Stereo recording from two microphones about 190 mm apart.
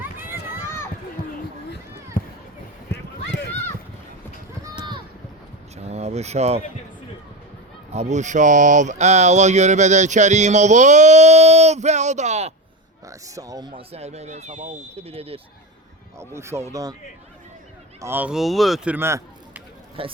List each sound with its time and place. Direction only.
0.0 s run: 10° right (ahead or behind)
1.2 s a sound: 50° left (ahead or behind)
2.2 s run: 45° left (ahead or behind)
5.7 s a sound: 35° right (ahead or behind)
7.9 s speech: 40° right (ahead or behind)
13.1 s speech: 15° right (ahead or behind)
16.1 s speech: 15° right (ahead or behind)
18.0 s speech: 10° right (ahead or behind)
18.9 s a sound: 10° right (ahead or behind)
20.0 s speech: 30° right (ahead or behind)